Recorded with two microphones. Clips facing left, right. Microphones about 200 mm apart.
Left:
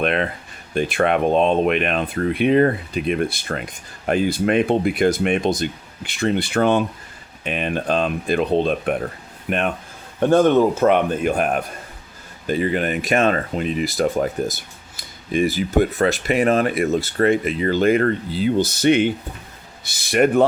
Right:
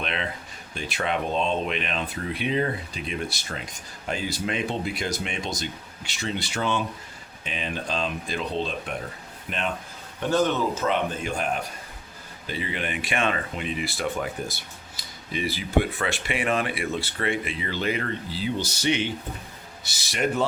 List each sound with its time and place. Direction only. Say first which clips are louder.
0.0 s speech: left 10 dB; 55° left (ahead or behind)
12.5 s speech: left 10 dB; 45° left (ahead or behind)